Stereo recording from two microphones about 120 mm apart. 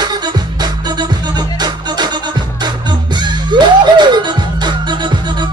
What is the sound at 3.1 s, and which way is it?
Music, 40° right (ahead or behind).